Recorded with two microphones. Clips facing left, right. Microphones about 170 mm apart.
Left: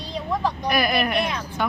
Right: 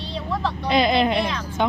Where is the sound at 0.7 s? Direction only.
20° right (ahead or behind).